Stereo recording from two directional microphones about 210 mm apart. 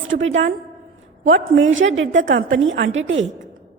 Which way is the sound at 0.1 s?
65° right (ahead or behind).